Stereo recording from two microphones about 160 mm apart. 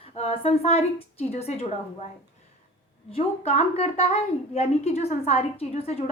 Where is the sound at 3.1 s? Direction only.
40° left (ahead or behind).